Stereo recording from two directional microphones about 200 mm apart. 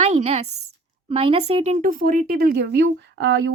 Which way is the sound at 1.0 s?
30° right (ahead or behind).